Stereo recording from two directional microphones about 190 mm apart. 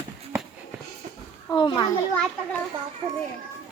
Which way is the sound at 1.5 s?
20° left (ahead or behind).